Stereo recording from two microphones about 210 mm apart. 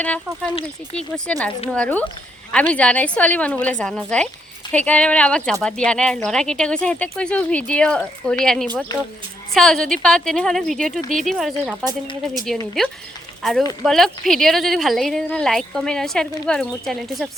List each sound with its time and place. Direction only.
0.0 s a woman's voice: 5° left (ahead or behind)
8.9 s a child's voice: 20° left (ahead or behind)
9.6 s a woman's voice: centre (ahead or behind)
13.4 s a woman's voice: centre (ahead or behind)